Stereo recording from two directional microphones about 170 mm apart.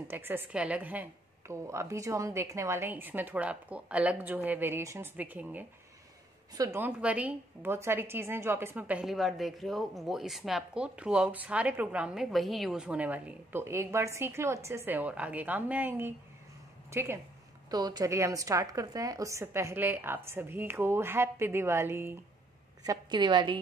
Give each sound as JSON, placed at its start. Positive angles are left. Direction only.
{"t": 0.1, "sound": "a woman's voice", "side_deg": -10}
{"t": 22.8, "sound": "a woman's voice", "side_deg": -25}